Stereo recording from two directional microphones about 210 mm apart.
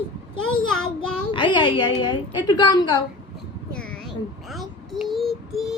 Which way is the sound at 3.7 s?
5° left (ahead or behind).